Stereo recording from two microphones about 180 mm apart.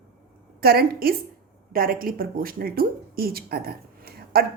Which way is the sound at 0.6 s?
55° right (ahead or behind).